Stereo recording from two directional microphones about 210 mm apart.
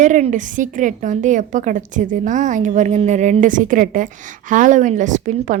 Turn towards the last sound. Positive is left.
turn(degrees=-35)  # may be behind; listen again after turning